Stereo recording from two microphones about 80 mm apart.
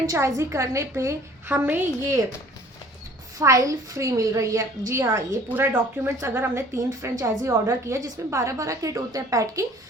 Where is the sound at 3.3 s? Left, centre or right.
Right.